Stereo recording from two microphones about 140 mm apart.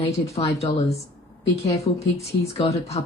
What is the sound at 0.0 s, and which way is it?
Speech, 50° left (ahead or behind).